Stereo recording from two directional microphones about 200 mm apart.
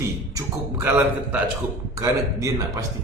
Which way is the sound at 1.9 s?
15° right (ahead or behind).